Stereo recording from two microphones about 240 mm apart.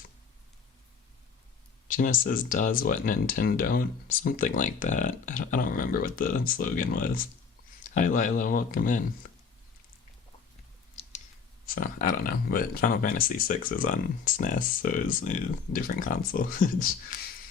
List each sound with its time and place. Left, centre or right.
1.9 s speech: left
11.6 s speech: left